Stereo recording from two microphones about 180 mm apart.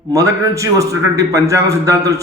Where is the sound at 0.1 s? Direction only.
15° right (ahead or behind).